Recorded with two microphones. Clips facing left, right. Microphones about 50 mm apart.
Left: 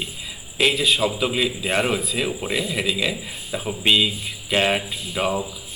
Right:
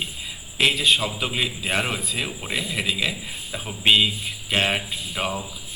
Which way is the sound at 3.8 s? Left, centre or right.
Centre.